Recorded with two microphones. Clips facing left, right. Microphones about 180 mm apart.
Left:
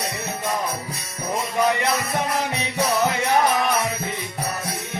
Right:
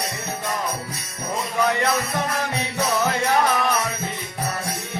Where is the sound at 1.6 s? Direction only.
15° left (ahead or behind).